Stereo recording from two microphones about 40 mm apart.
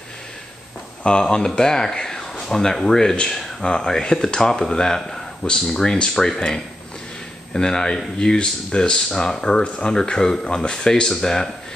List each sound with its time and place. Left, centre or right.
1.2 s speech: centre
9.6 s speech: left; by 11.5 s centre